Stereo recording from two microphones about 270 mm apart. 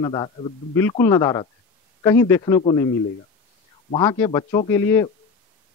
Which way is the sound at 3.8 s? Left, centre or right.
Centre.